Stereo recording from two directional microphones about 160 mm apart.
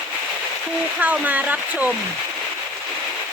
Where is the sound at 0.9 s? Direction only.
10° right (ahead or behind).